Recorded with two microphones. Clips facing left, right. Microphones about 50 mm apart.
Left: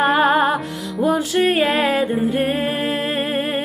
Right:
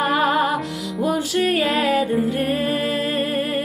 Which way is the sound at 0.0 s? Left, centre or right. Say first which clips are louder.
Left 3 dB; left.